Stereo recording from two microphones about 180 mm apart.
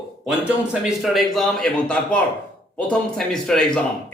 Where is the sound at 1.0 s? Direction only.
Centre (ahead or behind).